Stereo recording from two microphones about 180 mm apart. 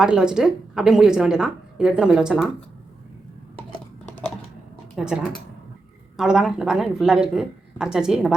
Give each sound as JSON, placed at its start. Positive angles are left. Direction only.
{"t": 0.0, "sound": "a woman's voice", "side_deg": -5}
{"t": 4.9, "sound": "a woman's voice", "side_deg": -5}